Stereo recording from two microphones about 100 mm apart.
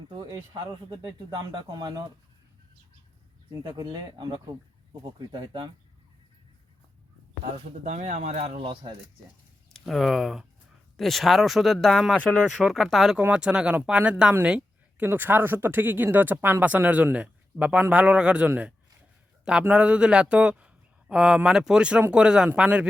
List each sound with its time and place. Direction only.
0.1 s speech: 45° right (ahead or behind)
3.6 s speech: 45° right (ahead or behind)
8.4 s speech: 90° right
8.6 s speech: 50° right (ahead or behind)
9.7 s speech: centre (ahead or behind)
12.5 s speech: centre (ahead or behind)